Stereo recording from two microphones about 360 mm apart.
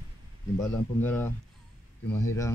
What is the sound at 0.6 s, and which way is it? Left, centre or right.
A man's voice, centre.